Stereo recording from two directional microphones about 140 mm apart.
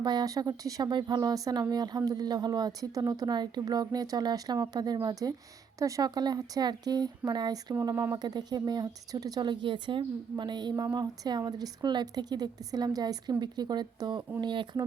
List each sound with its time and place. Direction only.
0.0 s speech: 30° right (ahead or behind)